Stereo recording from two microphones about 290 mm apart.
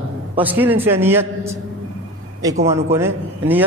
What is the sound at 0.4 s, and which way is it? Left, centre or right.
A man's voice, centre.